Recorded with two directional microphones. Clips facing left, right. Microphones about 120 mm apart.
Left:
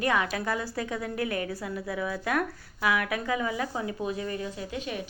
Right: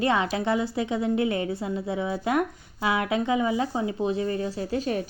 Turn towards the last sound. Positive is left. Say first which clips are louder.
# right 7 dB
turn(degrees=-35)  # may be behind; listen again after turning